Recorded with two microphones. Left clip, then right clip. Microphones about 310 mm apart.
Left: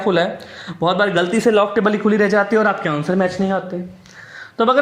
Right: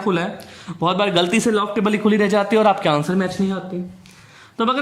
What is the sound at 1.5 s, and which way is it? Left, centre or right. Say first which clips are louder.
Speech: left 5 dB; centre.